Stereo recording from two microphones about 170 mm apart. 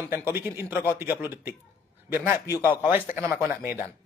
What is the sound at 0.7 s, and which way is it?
Speech, 20° left (ahead or behind).